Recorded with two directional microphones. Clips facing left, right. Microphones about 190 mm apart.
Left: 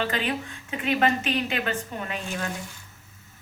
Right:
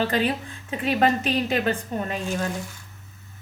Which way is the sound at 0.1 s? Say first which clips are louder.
Right 4 dB; 35° right (ahead or behind).